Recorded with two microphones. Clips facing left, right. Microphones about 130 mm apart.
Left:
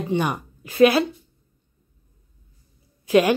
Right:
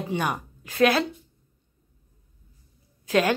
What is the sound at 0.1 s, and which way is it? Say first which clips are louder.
Speech: left 4 dB; centre (ahead or behind).